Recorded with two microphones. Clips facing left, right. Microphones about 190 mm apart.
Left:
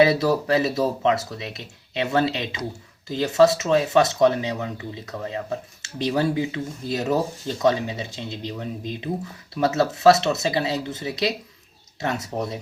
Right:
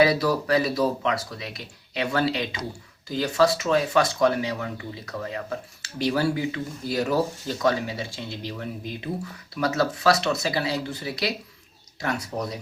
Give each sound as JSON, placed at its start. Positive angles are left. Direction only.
{"t": 0.0, "sound": "speech", "side_deg": 25}